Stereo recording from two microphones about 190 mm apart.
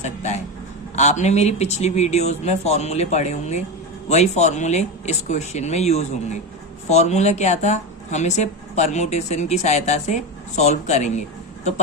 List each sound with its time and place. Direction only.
0.0 s speech: 40° left (ahead or behind)